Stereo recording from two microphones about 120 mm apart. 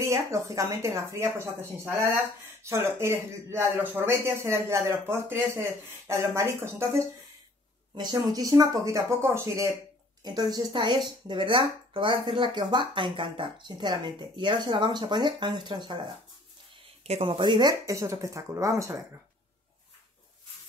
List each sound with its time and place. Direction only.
0.0 s speech: 25° right (ahead or behind)
7.9 s speech: 40° right (ahead or behind); by 9.7 s 20° right (ahead or behind)
10.2 s speech: 35° right (ahead or behind)
17.1 s speech: 55° right (ahead or behind); by 18.9 s 25° right (ahead or behind)